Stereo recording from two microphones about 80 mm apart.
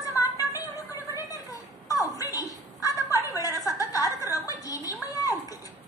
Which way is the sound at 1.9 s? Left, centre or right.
Left.